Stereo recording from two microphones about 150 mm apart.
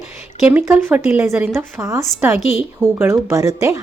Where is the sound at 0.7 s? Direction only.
10° right (ahead or behind).